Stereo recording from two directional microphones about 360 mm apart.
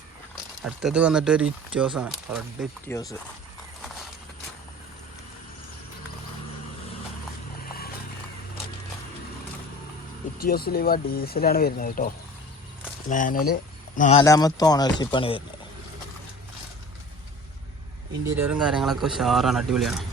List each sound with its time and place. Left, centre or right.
0.6 s speech: centre
7.6 s clip-clop: left
10.3 s speech: left
18.3 s speech: centre